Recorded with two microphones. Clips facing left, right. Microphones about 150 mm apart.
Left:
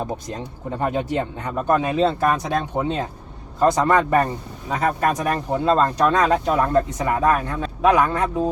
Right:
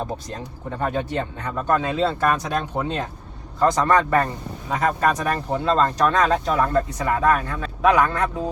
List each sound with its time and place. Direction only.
0.0 s speech: 20° left (ahead or behind)